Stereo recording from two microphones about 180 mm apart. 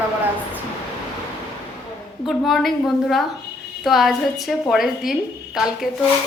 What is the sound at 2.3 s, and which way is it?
A woman's voice, centre (ahead or behind).